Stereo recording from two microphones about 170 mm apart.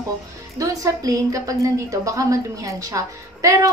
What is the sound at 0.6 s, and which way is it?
A woman's voice, 20° right (ahead or behind).